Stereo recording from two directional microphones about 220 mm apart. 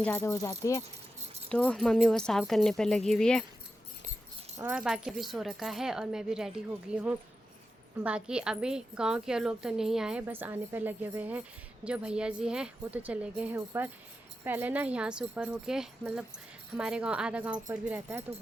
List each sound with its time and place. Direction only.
0.0 s speech: 5° left (ahead or behind)
1.5 s a woman's voice: 5° left (ahead or behind)
4.5 s a woman's voice: 5° right (ahead or behind)